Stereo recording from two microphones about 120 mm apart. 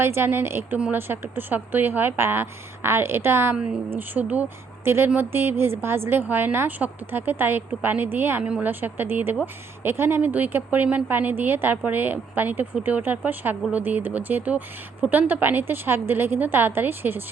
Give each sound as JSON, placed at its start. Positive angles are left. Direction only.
{"t": 0.0, "sound": "a woman's voice", "side_deg": -20}